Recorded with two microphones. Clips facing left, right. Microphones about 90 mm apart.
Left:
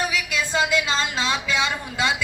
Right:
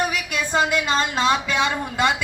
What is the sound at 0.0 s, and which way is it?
A woman's voice, 50° right (ahead or behind).